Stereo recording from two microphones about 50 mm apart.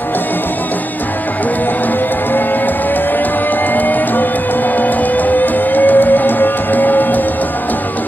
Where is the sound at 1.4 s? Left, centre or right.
Left.